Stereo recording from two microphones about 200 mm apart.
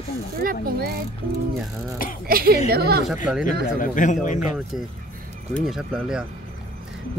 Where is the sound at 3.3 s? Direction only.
5° right (ahead or behind).